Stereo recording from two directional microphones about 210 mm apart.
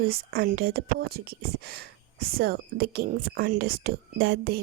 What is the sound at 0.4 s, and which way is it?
A woman's voice, 45° right (ahead or behind).